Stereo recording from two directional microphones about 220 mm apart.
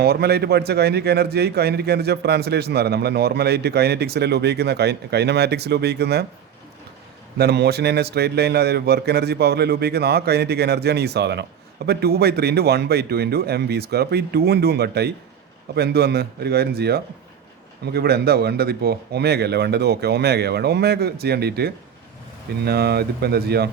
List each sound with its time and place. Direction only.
0.0 s a man's voice: 45° right (ahead or behind)
7.3 s a man's voice: 45° right (ahead or behind)